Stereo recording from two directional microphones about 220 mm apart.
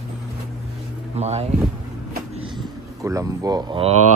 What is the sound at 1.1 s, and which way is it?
Speech, 30° right (ahead or behind).